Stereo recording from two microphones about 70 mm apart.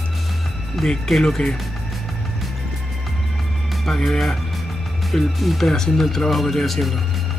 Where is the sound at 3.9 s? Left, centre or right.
Centre.